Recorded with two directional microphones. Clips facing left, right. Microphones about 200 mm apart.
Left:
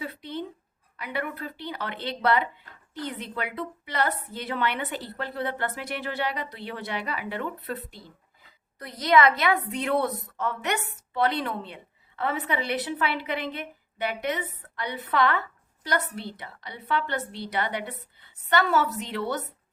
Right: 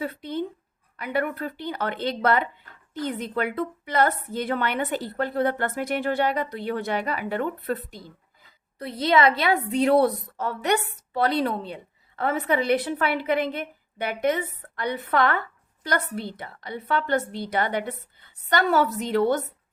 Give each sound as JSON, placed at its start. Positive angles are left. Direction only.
{"t": 0.0, "sound": "a sound", "side_deg": -50}
{"t": 0.9, "sound": "a woman's voice", "side_deg": -50}
{"t": 8.8, "sound": "a woman's voice", "side_deg": -25}